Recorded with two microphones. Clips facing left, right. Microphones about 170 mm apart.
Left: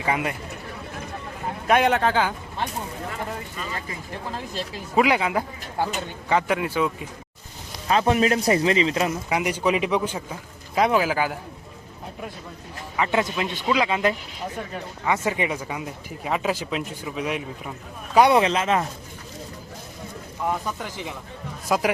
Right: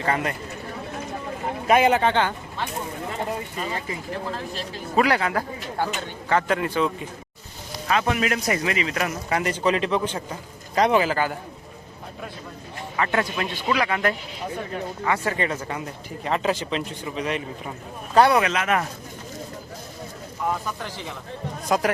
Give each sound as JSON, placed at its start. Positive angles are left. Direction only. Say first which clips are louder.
{"t": 0.0, "sound": "speech", "louder": "even", "side_deg": 10}
{"t": 1.6, "sound": "speech", "louder": "right 1 dB", "side_deg": 0}
{"t": 3.6, "sound": "speech", "louder": "right 3 dB", "side_deg": -25}
{"t": 4.9, "sound": "speech", "louder": "left 1 dB", "side_deg": 15}
{"t": 7.9, "sound": "speech", "louder": "left 3 dB", "side_deg": 30}
{"t": 9.3, "sound": "speech", "louder": "right 2 dB", "side_deg": 10}
{"t": 13.0, "sound": "speech", "louder": "left 1 dB", "side_deg": 20}
{"t": 18.3, "sound": "speech", "louder": "left 2 dB", "side_deg": 25}
{"t": 20.5, "sound": "speech", "louder": "left 1 dB", "side_deg": 15}